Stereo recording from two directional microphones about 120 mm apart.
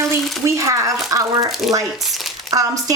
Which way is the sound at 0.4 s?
25° right (ahead or behind).